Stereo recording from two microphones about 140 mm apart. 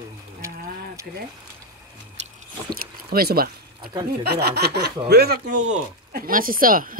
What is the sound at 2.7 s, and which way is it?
Speech, 90° right.